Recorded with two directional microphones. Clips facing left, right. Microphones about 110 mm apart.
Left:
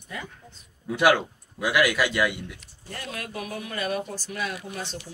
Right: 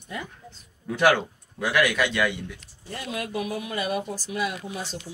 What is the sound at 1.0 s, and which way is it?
A man's voice, 5° left (ahead or behind).